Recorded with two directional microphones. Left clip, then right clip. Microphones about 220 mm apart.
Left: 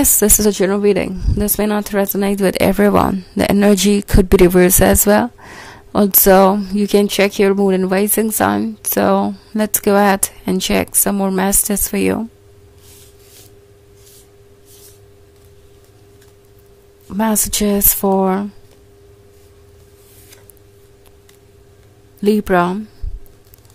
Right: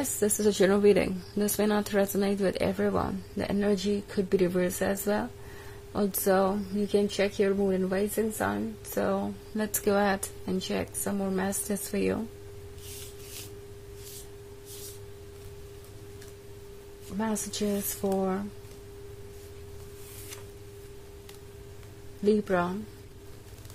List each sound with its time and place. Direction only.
0.2 s speech: 40° left (ahead or behind)
0.6 s speech: 25° left (ahead or behind); by 12.3 s 40° left (ahead or behind)
17.2 s speech: 45° left (ahead or behind)
22.2 s speech: 45° left (ahead or behind)